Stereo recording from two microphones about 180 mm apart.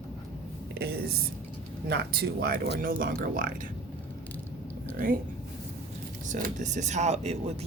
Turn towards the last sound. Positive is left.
turn(degrees=-40)  # may be behind; listen again after turning